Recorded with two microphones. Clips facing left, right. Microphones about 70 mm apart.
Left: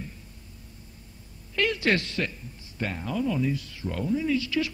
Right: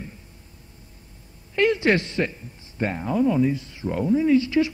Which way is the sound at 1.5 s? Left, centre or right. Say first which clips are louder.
Right 5 dB; right.